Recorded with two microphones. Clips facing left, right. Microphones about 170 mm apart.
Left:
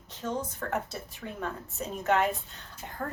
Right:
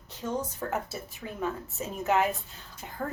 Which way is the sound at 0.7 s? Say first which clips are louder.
Even; 5° right (ahead or behind).